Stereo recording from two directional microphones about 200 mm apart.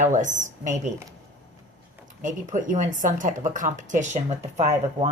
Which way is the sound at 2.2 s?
40° right (ahead or behind).